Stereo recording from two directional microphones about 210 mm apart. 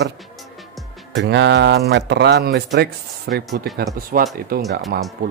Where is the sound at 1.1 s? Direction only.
55° right (ahead or behind).